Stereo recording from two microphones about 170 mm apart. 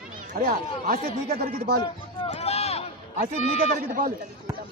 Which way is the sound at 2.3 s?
40° left (ahead or behind).